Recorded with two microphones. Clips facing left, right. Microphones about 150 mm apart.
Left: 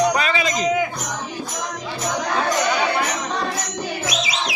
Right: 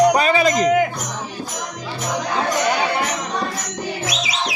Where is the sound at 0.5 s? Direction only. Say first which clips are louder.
Right 4 dB; 55° right (ahead or behind).